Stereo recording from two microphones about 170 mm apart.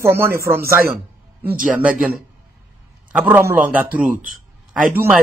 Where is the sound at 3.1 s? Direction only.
10° right (ahead or behind).